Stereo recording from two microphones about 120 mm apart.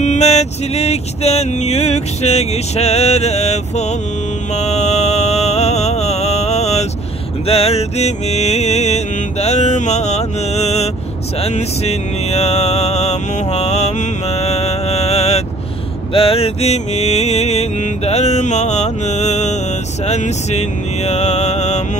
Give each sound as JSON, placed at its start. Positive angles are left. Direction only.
{"t": 0.0, "sound": "mantra", "side_deg": 70}
{"t": 16.1, "sound": "mantra", "side_deg": 50}